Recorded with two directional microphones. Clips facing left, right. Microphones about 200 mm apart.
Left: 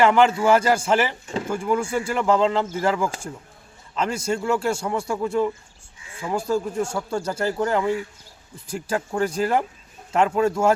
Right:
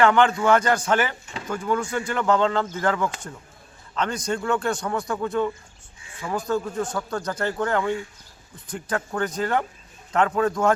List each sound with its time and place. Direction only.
0.0 s a man's voice: 5° left (ahead or behind)
6.8 s a man's voice: 25° left (ahead or behind)
7.2 s speech: 10° left (ahead or behind)